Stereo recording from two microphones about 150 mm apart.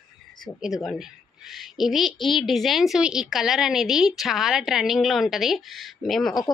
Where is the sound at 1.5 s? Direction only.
Centre (ahead or behind).